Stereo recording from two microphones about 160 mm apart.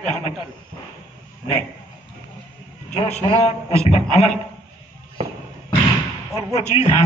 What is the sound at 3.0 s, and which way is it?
A man's voice, 40° left (ahead or behind).